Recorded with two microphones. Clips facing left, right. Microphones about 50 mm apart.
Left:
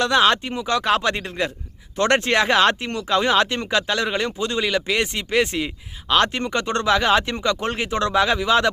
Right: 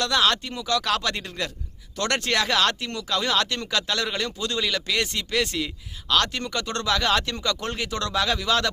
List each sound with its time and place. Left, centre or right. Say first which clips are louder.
0.0 s speech: left 5 dB; left